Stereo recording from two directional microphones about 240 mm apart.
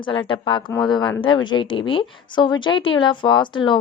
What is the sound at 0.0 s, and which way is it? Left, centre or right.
Speech, centre.